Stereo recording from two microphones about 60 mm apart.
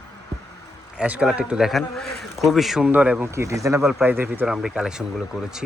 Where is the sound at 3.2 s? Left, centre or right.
Right.